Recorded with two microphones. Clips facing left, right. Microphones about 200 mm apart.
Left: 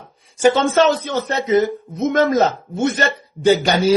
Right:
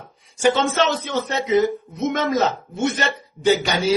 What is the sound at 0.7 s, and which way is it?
Speech, 50° left (ahead or behind).